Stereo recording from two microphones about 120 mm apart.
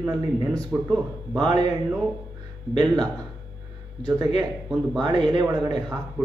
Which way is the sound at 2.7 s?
35° right (ahead or behind).